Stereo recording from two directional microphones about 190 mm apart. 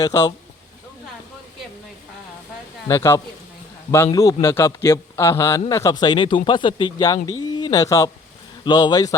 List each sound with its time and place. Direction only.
0.0 s a man's voice: 20° left (ahead or behind)
2.8 s a man's voice: 15° left (ahead or behind)